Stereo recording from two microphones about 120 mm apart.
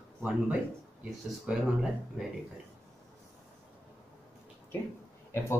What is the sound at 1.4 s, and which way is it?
Speech, 5° right (ahead or behind).